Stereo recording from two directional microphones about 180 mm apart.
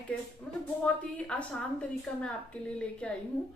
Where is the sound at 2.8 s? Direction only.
5° left (ahead or behind).